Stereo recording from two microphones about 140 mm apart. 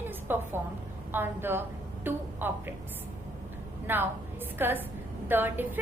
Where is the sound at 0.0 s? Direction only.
15° right (ahead or behind).